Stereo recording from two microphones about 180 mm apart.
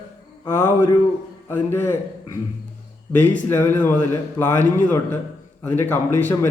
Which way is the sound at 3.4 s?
10° left (ahead or behind).